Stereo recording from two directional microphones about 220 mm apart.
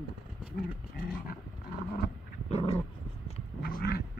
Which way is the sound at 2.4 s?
25° left (ahead or behind).